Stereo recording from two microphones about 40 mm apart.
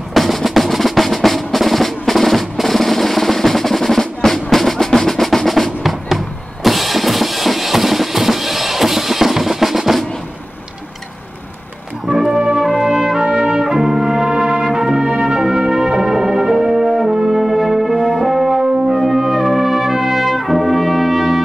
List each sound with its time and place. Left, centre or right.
0.1 s drum: centre
12.1 s music: centre
12.5 s brass instrument: centre
14.6 s music: centre